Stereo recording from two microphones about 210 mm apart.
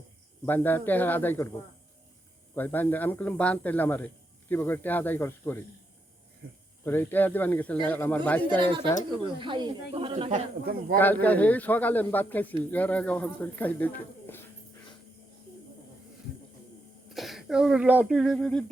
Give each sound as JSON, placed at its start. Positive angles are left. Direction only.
{"t": 0.4, "sound": "a man's voice", "side_deg": 10}
{"t": 2.6, "sound": "a man's voice", "side_deg": 10}
{"t": 6.8, "sound": "a man's voice", "side_deg": 10}
{"t": 8.4, "sound": "speech", "side_deg": -20}
{"t": 11.0, "sound": "a man's voice", "side_deg": 10}
{"t": 17.2, "sound": "speech", "side_deg": 0}